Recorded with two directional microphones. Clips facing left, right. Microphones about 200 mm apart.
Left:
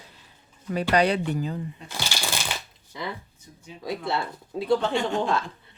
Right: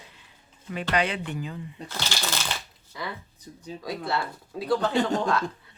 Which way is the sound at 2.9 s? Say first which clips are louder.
Left 2 dB; 25° left (ahead or behind).